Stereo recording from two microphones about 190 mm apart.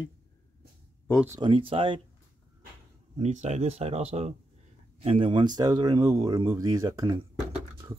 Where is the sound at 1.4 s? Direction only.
30° right (ahead or behind).